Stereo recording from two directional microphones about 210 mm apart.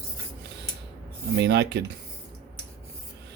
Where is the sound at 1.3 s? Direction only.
55° right (ahead or behind).